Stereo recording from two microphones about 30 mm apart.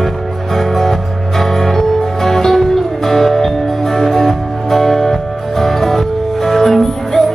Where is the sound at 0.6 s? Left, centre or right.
Centre.